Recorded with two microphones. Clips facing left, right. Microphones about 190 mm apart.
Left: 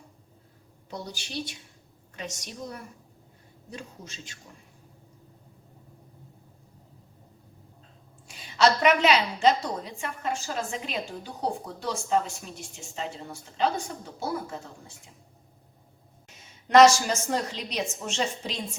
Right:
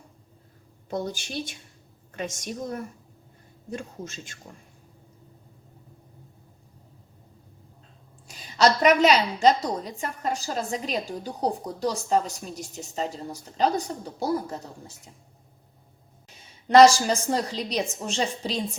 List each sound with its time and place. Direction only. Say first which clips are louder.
0.9 s speech: right 8 dB; 50° right (ahead or behind)
8.3 s a woman's voice: right 1 dB; 40° right (ahead or behind)
16.6 s a woman's voice: right 2 dB; 30° right (ahead or behind)